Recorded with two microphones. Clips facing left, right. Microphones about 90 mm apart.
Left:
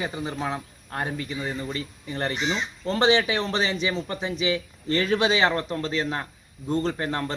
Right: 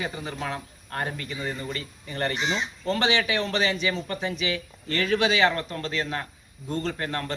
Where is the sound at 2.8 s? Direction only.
30° left (ahead or behind).